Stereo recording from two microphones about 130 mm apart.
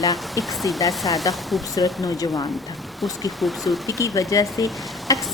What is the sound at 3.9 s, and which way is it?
Speech, 25° left (ahead or behind).